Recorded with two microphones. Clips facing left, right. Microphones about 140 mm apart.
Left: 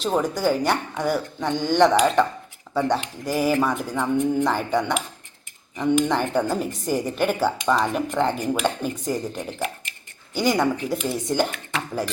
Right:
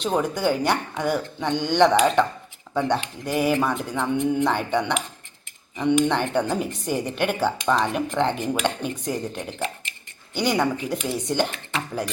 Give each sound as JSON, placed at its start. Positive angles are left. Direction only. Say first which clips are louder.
{"t": 0.0, "sound": "speech", "louder": "left 1 dB", "side_deg": 0}